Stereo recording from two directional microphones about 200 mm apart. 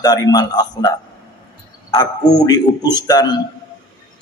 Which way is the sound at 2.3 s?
20° left (ahead or behind).